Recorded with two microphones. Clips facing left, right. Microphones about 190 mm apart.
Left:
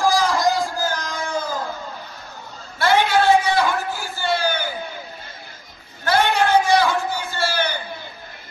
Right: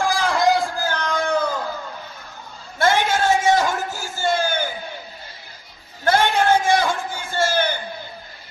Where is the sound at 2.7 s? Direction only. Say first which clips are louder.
Left 2 dB; 45° right (ahead or behind).